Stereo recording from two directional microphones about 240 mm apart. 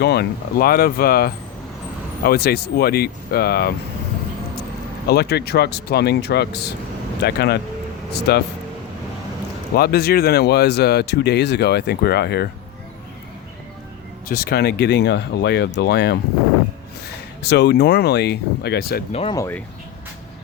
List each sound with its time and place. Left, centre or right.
0.0 s speech: left
5.0 s speech: left
9.7 s speech: left
14.3 s speech: left
17.5 s speech: left
19.1 s speech: left